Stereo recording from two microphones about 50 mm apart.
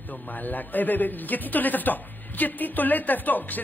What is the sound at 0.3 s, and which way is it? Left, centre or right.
A man's voice, left.